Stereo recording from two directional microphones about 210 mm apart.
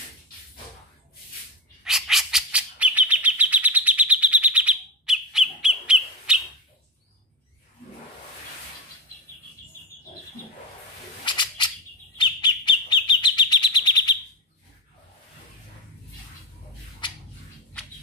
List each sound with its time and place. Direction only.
1.9 s bird: centre (ahead or behind)
11.2 s a sound: 20° left (ahead or behind)
12.2 s bird: 20° left (ahead or behind)